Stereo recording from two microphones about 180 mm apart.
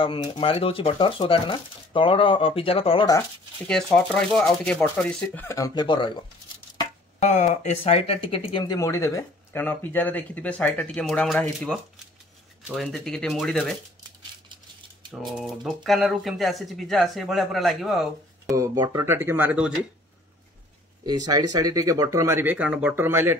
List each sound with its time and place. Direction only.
0.0 s speech: 30° left (ahead or behind)
3.6 s speech: 5° left (ahead or behind); by 6.2 s 25° left (ahead or behind)
7.2 s speech: 40° left (ahead or behind); by 13.7 s centre (ahead or behind)
15.0 s speech: centre (ahead or behind)
18.5 s speech: 20° right (ahead or behind)
21.0 s speech: 20° right (ahead or behind)